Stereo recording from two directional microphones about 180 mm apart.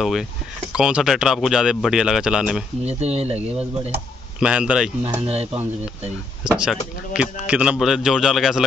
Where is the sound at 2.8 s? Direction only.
35° right (ahead or behind).